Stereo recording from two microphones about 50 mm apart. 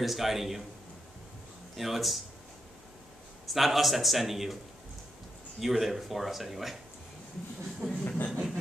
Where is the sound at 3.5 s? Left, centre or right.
Centre.